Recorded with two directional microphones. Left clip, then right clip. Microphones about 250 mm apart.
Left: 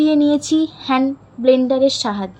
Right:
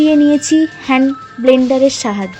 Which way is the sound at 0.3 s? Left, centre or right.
Centre.